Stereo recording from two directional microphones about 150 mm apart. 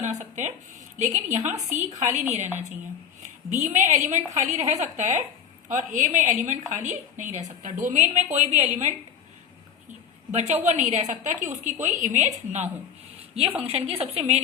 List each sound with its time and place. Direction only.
0.0 s a woman's voice: 50° right (ahead or behind)
3.5 s a woman's voice: 50° right (ahead or behind)
10.3 s a woman's voice: 50° right (ahead or behind)
13.6 s a woman's voice: 40° right (ahead or behind)